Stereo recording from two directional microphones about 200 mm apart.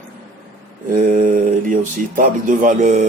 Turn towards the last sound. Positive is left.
turn(degrees=-40)  # may be behind; listen again after turning